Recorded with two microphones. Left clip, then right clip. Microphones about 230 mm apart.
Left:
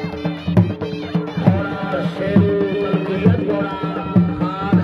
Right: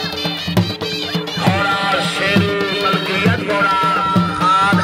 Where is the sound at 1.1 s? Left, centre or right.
Right.